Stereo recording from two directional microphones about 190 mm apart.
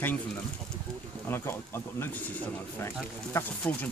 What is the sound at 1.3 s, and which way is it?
Speech, 10° left (ahead or behind).